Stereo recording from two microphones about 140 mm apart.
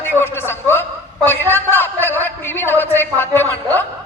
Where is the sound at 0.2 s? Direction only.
15° left (ahead or behind).